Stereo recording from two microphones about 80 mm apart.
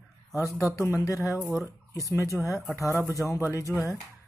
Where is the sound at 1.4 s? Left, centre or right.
Centre.